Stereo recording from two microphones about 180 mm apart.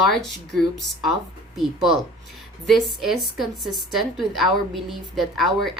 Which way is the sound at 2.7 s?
Centre (ahead or behind).